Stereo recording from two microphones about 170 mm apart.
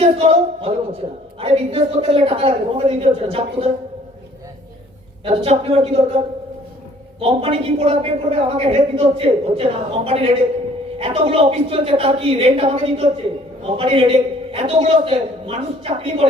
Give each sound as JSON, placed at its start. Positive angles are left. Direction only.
{"t": 0.0, "sound": "a woman's voice", "side_deg": -35}
{"t": 5.2, "sound": "a woman's voice", "side_deg": -35}